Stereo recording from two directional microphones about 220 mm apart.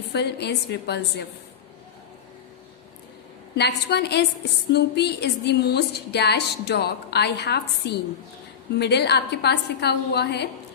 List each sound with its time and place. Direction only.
0.1 s speech: 50° left (ahead or behind)
3.5 s speech: 50° left (ahead or behind)